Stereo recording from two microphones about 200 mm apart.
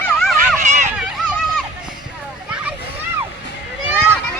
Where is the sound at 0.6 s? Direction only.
35° right (ahead or behind).